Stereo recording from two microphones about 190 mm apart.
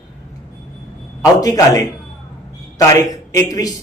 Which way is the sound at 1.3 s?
20° left (ahead or behind).